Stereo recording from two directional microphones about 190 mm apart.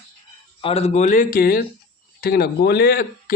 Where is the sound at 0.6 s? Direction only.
35° left (ahead or behind).